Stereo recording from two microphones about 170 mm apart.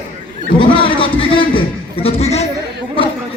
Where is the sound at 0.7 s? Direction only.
30° left (ahead or behind).